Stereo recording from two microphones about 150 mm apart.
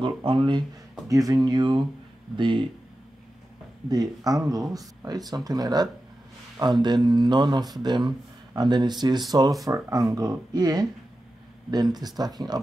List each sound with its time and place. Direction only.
0.0 s speech: 35° right (ahead or behind)
1.0 s speech: 25° right (ahead or behind)
3.9 s speech: 25° right (ahead or behind)